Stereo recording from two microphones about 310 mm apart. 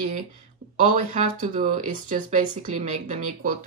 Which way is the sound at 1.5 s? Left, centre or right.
Right.